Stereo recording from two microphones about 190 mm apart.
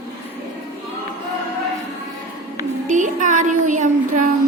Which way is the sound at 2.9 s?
40° right (ahead or behind).